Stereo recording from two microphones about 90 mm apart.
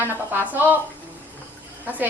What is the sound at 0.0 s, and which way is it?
Speech, 20° right (ahead or behind).